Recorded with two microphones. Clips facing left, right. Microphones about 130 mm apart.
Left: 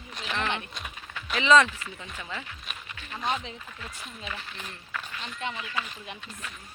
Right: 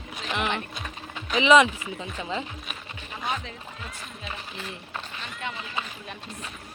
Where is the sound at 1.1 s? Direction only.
15° right (ahead or behind).